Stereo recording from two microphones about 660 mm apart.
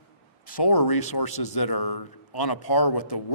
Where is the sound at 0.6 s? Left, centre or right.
Left.